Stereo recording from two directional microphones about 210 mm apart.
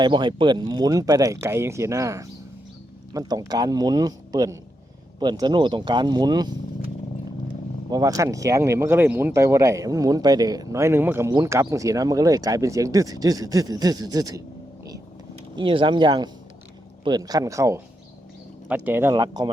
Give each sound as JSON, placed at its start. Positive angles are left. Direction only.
{"t": 0.0, "sound": "a man's voice", "side_deg": -20}
{"t": 15.5, "sound": "a man's voice", "side_deg": -25}